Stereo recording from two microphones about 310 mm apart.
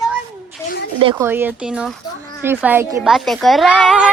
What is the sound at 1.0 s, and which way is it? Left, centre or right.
A woman's voice, centre.